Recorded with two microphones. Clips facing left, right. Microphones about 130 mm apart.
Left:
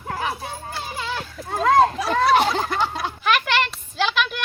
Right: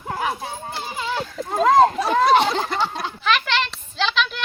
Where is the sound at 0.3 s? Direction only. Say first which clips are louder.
Right 2 dB; 25° right (ahead or behind).